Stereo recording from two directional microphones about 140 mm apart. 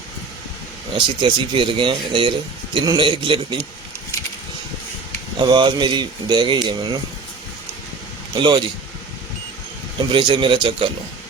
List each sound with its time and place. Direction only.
0.9 s speech: 35° right (ahead or behind)
5.4 s speech: 35° right (ahead or behind)
8.4 s speech: 35° right (ahead or behind)
10.1 s speech: 35° right (ahead or behind)